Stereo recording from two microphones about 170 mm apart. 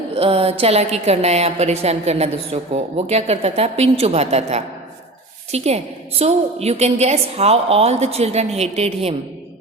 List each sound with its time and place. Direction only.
0.1 s a woman's voice: 35° right (ahead or behind)